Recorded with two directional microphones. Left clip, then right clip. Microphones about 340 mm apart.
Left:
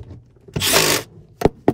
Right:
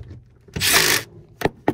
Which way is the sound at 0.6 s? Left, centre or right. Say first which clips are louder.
Left 1 dB; centre.